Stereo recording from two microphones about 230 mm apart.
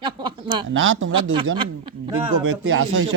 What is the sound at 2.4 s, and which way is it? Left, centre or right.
Speech, right.